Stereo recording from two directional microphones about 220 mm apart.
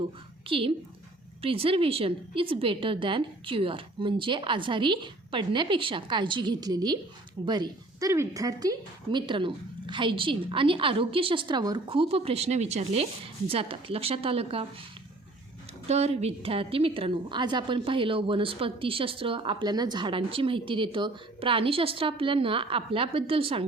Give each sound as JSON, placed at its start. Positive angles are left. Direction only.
{"t": 0.4, "sound": "a woman's voice", "side_deg": -25}
{"t": 15.9, "sound": "a woman's voice", "side_deg": -30}